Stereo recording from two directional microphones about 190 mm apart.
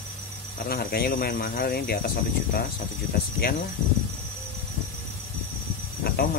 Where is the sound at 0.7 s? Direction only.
55° left (ahead or behind).